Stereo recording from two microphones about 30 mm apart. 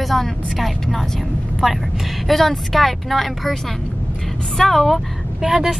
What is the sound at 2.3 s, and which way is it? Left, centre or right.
Speech, centre.